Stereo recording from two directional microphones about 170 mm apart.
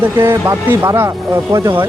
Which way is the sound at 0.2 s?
15° right (ahead or behind).